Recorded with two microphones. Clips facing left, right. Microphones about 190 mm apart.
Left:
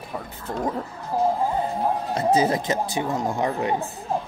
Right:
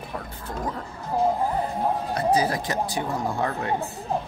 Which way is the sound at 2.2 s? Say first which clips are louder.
Left 3 dB; 25° left (ahead or behind).